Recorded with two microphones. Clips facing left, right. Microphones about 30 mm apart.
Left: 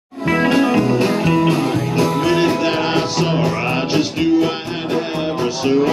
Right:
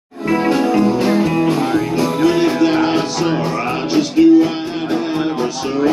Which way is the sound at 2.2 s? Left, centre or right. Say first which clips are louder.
Right 6 dB; centre.